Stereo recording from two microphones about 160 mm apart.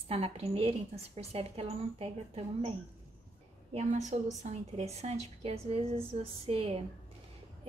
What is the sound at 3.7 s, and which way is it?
A woman's voice, 45° right (ahead or behind).